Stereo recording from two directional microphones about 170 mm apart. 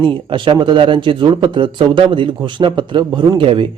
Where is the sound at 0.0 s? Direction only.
30° right (ahead or behind).